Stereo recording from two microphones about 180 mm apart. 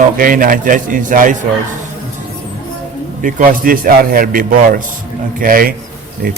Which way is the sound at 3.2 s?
50° right (ahead or behind).